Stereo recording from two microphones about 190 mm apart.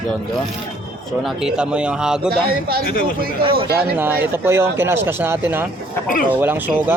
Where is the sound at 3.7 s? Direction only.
10° right (ahead or behind).